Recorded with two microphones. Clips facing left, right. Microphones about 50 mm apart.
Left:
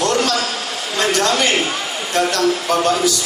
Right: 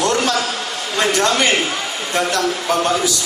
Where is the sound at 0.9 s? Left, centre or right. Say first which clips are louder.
Right 1 dB; centre.